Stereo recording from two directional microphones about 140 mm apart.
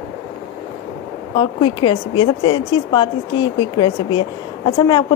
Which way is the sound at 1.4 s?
35° left (ahead or behind).